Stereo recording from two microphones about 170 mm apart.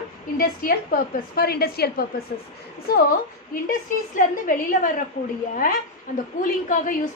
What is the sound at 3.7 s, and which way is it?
A woman's voice, 50° left (ahead or behind).